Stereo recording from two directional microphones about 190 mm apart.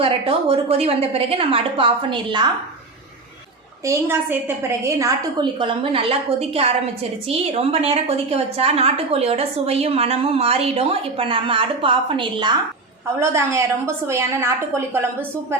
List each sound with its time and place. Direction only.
0.0 s a woman's voice: 30° right (ahead or behind)
3.8 s a woman's voice: 10° right (ahead or behind)
13.1 s a woman's voice: 15° right (ahead or behind)